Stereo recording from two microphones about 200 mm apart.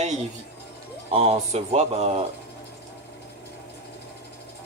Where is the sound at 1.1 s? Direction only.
30° right (ahead or behind).